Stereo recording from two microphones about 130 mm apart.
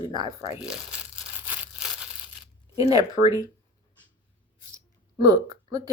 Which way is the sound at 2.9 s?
30° right (ahead or behind).